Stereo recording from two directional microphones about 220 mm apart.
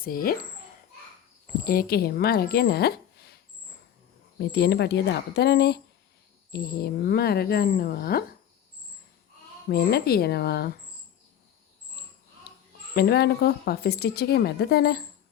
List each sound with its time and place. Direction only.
0.0 s a child's voice: 40° left (ahead or behind)
1.6 s speech: 40° left (ahead or behind)
4.4 s speech: 50° left (ahead or behind)
9.6 s speech: 45° left (ahead or behind)
12.5 s a sound: 45° left (ahead or behind)
12.9 s speech: 45° left (ahead or behind)